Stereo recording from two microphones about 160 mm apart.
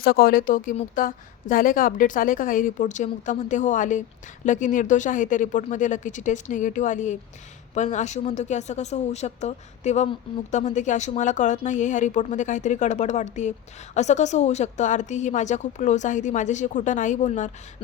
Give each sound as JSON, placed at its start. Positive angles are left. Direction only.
{"t": 0.0, "sound": "a woman's voice", "side_deg": 70}